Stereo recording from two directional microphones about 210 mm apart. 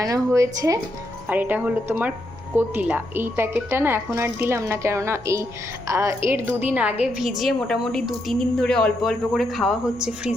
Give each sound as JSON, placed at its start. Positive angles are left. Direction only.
{"t": 0.0, "sound": "a woman's voice", "side_deg": -15}